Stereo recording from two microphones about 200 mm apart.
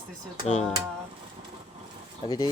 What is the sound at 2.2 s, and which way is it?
Speech, 25° left (ahead or behind).